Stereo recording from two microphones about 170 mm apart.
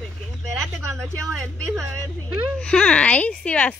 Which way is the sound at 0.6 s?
Centre (ahead or behind).